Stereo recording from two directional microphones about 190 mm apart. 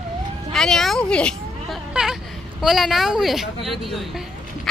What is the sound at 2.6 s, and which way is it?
A woman's voice, centre (ahead or behind).